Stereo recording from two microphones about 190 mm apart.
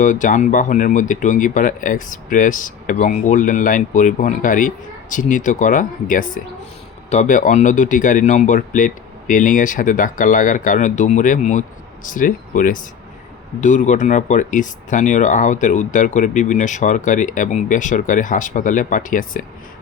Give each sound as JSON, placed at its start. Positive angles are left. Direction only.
{"t": 0.0, "sound": "speech", "side_deg": 45}